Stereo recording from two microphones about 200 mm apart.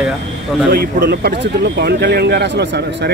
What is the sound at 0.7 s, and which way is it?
Speech, 50° right (ahead or behind).